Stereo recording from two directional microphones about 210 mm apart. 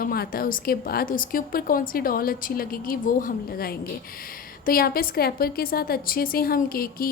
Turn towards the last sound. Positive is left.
turn(degrees=45)  # may be behind; listen again after turning